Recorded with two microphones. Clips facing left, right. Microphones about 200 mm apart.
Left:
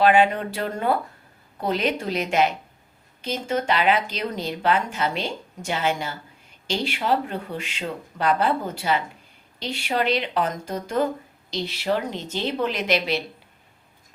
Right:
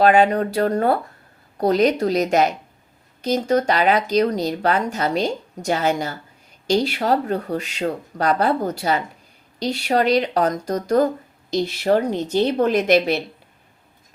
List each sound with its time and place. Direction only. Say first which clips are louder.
0.0 s a woman's voice: right 3 dB; 40° right (ahead or behind)